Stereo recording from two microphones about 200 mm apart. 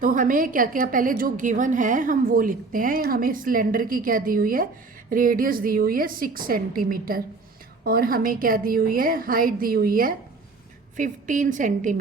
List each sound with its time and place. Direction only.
0.0 s a woman's voice: 45° right (ahead or behind)